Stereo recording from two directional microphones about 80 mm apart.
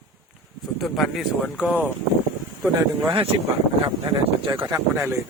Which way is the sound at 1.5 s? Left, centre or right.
Centre.